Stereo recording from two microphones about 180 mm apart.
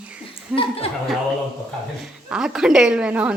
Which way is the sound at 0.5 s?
30° left (ahead or behind).